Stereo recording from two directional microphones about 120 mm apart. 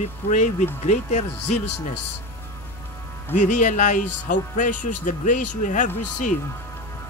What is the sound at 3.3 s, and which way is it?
Speech, 90° left.